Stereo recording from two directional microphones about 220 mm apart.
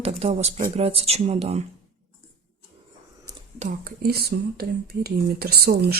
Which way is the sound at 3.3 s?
15° right (ahead or behind).